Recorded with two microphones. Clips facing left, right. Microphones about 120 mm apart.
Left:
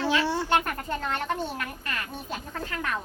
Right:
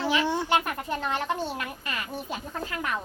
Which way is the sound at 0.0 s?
15° right (ahead or behind).